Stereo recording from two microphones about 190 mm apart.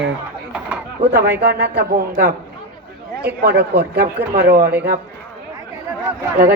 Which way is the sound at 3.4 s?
55° right (ahead or behind).